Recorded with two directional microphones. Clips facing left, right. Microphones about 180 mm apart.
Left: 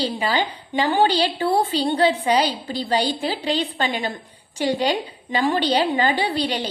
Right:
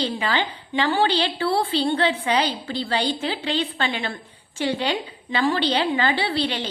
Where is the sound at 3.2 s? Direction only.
35° left (ahead or behind).